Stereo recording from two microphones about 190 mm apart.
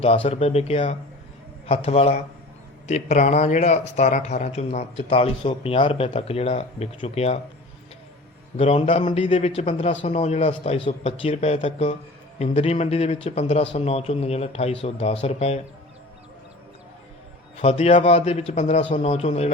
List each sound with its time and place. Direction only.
0.0 s speech: 30° left (ahead or behind)
8.5 s speech: 30° left (ahead or behind)
17.6 s speech: 30° left (ahead or behind)